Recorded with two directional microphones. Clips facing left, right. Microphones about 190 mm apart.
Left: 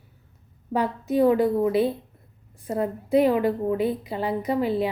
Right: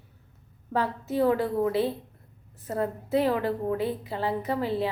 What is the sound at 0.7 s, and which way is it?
A woman's voice, 15° left (ahead or behind).